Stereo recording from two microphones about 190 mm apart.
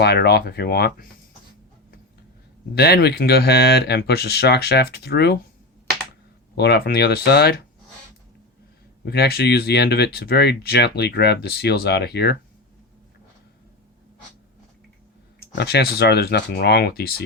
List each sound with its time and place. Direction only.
0.0 s speech: 60° left (ahead or behind)
2.7 s speech: 55° left (ahead or behind)
6.6 s speech: 55° left (ahead or behind)
9.0 s speech: 55° left (ahead or behind)
15.5 s speech: 55° left (ahead or behind)